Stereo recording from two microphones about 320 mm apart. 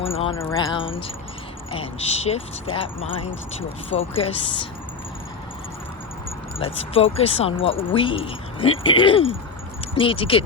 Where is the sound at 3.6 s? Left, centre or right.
Left.